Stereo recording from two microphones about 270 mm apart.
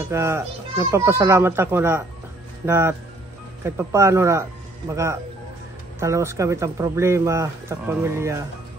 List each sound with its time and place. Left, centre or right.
0.1 s speech: centre